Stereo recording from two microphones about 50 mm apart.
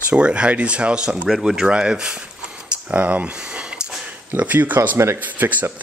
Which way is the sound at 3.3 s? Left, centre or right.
Centre.